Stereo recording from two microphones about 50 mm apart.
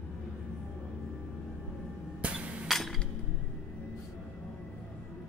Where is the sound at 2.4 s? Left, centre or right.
Right.